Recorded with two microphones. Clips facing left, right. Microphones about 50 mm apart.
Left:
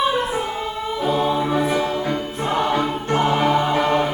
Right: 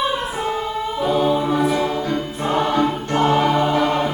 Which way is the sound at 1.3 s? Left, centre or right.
Centre.